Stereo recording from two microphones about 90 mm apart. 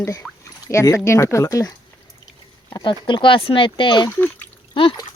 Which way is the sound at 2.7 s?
60° left (ahead or behind).